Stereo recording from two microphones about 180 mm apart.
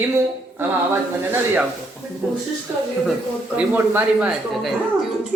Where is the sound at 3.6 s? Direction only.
10° right (ahead or behind).